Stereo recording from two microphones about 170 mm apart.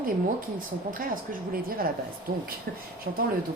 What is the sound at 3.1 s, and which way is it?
Speech, 55° right (ahead or behind).